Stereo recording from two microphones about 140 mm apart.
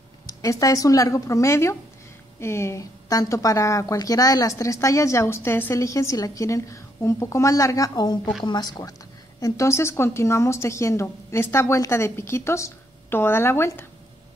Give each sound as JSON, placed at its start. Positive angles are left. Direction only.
{"t": 0.3, "sound": "speech", "side_deg": 25}